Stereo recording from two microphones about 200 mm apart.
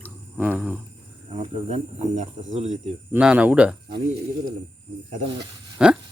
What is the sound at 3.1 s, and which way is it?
Speech, 5° right (ahead or behind).